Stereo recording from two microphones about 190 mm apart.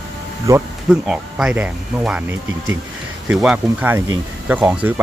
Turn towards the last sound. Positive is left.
turn(degrees=-10)  # may be behind; listen again after turning